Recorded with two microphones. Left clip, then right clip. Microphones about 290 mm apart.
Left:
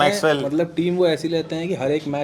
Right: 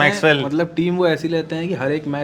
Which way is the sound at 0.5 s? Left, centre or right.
Right.